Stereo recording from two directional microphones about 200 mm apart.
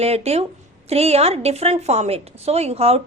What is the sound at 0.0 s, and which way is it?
Speech, 30° right (ahead or behind).